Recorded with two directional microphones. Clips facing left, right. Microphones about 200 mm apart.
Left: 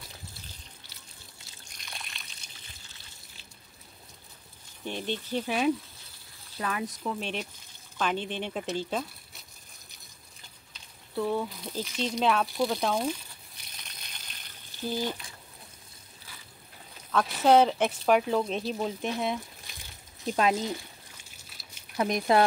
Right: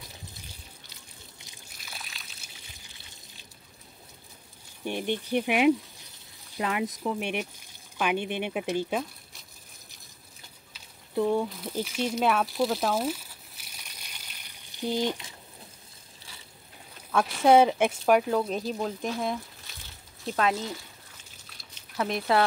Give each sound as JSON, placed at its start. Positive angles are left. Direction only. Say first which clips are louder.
{"t": 1.7, "sound": "water", "louder": "even", "side_deg": -5}
{"t": 4.8, "sound": "speech", "louder": "right 3 dB", "side_deg": -15}
{"t": 11.1, "sound": "speech", "louder": "right 4 dB", "side_deg": -20}
{"t": 11.4, "sound": "a sound", "louder": "right 3 dB", "side_deg": -5}
{"t": 17.4, "sound": "speech", "louder": "right 2 dB", "side_deg": -10}
{"t": 19.0, "sound": "speech", "louder": "even", "side_deg": 15}
{"t": 20.3, "sound": "speech", "louder": "left 1 dB", "side_deg": 20}
{"t": 21.2, "sound": "water", "louder": "right 1 dB", "side_deg": 10}